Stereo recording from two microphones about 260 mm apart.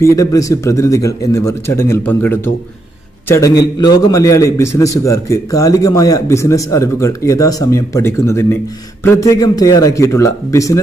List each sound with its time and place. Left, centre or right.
0.0 s a man's voice: centre